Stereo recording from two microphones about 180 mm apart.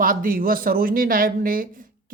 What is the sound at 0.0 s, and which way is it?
Speech, 50° right (ahead or behind).